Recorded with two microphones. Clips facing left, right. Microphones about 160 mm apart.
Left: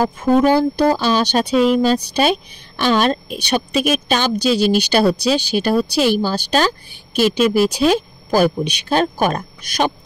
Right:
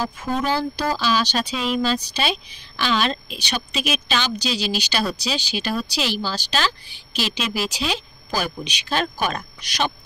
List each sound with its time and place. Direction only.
0.0 s a woman's voice: 55° left (ahead or behind)